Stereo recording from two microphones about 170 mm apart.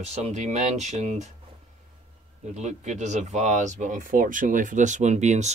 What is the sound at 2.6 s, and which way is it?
Speech, 45° right (ahead or behind).